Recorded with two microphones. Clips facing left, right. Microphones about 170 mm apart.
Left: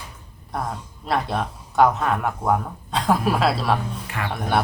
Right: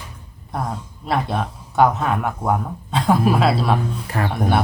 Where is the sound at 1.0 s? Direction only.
Centre (ahead or behind).